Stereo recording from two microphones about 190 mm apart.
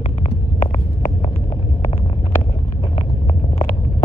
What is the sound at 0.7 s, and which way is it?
Vehicle, 30° left (ahead or behind).